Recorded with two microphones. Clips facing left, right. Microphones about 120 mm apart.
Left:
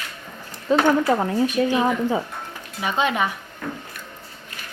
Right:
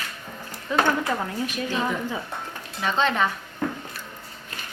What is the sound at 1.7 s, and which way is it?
A woman's voice, 20° left (ahead or behind).